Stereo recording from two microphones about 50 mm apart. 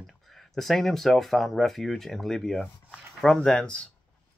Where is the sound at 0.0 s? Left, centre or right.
Centre.